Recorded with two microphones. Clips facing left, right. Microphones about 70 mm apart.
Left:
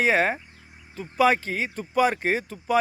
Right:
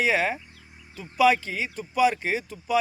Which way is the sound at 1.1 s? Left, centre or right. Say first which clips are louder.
Even; left.